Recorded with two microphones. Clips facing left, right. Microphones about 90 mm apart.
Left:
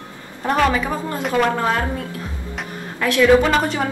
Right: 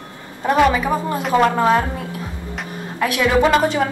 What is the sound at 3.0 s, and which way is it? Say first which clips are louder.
Speech: left 2 dB; 15° right (ahead or behind).